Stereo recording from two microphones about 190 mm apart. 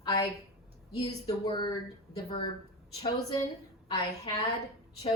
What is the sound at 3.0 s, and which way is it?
A woman's voice, 25° left (ahead or behind).